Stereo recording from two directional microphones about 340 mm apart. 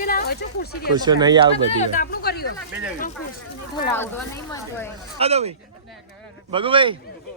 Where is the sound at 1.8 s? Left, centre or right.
Left.